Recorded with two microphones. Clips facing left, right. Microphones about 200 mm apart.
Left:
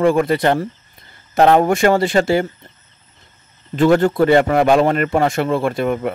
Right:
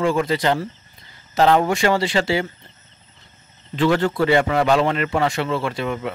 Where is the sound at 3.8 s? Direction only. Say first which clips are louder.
Left 5 dB; 45° left (ahead or behind).